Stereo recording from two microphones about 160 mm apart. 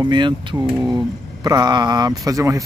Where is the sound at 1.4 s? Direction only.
25° right (ahead or behind).